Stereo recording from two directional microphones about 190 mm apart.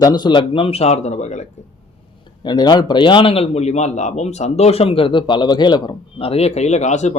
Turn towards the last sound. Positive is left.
turn(degrees=40)  # may be behind; listen again after turning